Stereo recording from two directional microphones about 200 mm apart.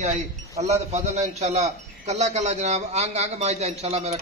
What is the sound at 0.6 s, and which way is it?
A man's voice, 35° right (ahead or behind).